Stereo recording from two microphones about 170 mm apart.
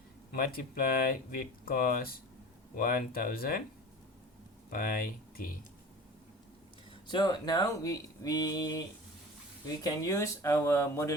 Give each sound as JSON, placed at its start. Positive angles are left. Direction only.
{"t": 0.3, "sound": "speech", "side_deg": 60}
{"t": 4.7, "sound": "speech", "side_deg": 60}
{"t": 7.1, "sound": "speech", "side_deg": 25}